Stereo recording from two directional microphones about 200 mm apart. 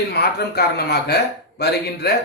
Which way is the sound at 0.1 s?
55° left (ahead or behind).